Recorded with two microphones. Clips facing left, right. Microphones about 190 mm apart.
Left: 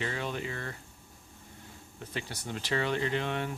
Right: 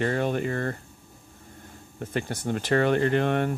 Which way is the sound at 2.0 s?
50° right (ahead or behind).